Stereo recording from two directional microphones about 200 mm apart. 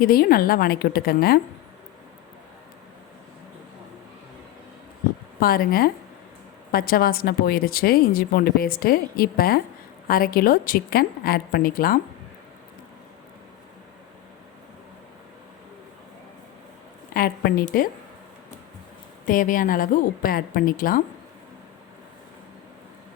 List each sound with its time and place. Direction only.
0.0 s a woman's voice: 45° left (ahead or behind)
5.4 s a woman's voice: 50° left (ahead or behind)
17.2 s a woman's voice: 45° left (ahead or behind)
19.2 s a woman's voice: 40° left (ahead or behind)